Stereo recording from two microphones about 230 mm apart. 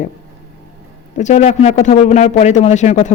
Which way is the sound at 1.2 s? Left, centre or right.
Left.